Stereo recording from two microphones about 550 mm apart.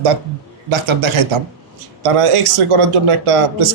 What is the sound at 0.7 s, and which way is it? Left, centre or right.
A man's voice, right.